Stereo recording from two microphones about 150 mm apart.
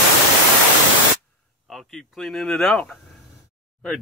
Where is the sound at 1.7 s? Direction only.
5° left (ahead or behind).